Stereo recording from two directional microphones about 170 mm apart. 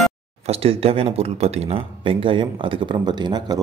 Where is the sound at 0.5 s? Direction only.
35° right (ahead or behind).